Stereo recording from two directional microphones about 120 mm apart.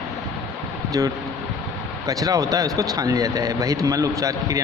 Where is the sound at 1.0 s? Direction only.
25° right (ahead or behind).